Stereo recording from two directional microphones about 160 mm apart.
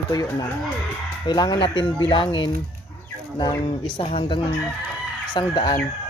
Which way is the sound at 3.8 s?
30° left (ahead or behind).